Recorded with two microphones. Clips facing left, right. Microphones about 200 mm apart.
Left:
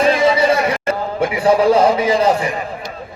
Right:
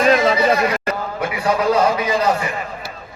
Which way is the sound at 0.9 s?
30° left (ahead or behind).